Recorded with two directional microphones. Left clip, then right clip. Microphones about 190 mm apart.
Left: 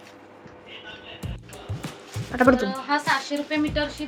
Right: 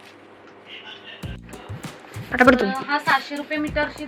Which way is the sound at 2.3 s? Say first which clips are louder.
Right 4 dB; centre (ahead or behind).